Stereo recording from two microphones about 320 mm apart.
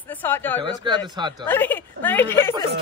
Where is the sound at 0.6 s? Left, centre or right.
Centre.